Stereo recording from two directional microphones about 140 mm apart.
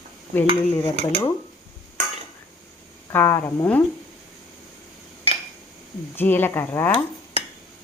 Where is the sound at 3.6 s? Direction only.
15° left (ahead or behind).